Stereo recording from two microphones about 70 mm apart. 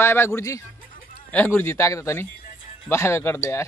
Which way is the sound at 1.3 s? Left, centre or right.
Left.